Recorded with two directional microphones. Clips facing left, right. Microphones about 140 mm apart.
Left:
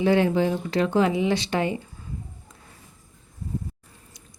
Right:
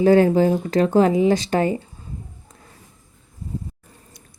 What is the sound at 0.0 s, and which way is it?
Speech, 40° right (ahead or behind).